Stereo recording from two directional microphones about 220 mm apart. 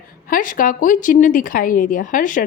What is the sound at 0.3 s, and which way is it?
A woman's voice, 40° left (ahead or behind).